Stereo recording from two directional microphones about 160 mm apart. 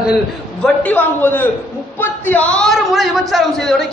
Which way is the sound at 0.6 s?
10° left (ahead or behind).